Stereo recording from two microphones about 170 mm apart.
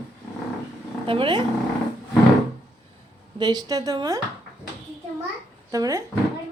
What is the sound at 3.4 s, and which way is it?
Speech, 25° right (ahead or behind).